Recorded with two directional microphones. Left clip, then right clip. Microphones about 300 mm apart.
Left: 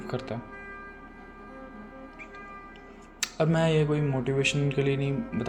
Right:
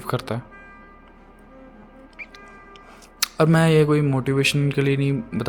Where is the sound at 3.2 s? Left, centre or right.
Right.